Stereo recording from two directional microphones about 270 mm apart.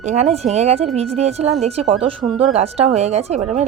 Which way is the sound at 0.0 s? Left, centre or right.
Right.